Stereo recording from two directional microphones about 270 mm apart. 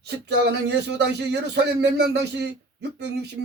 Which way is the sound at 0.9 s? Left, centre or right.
Right.